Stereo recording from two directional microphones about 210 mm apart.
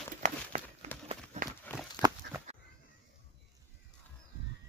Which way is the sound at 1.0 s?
35° right (ahead or behind).